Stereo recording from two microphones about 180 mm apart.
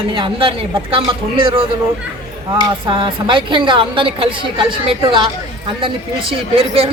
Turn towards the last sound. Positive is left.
turn(degrees=-30)  # may be behind; listen again after turning